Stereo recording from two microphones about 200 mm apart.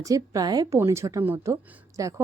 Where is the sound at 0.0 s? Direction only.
20° right (ahead or behind).